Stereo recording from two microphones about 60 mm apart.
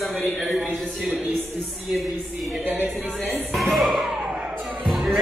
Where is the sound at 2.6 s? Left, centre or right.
Right.